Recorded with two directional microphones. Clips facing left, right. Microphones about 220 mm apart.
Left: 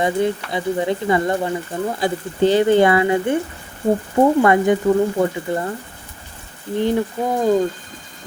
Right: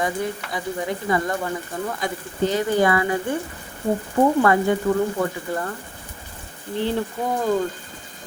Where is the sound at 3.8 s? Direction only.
35° left (ahead or behind).